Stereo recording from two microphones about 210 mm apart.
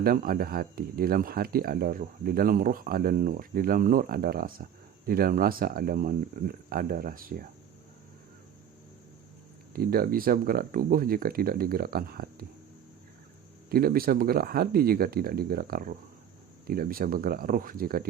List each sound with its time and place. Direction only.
0.0 s speech: 45° right (ahead or behind)
9.7 s speech: 45° right (ahead or behind)
13.7 s speech: 45° right (ahead or behind)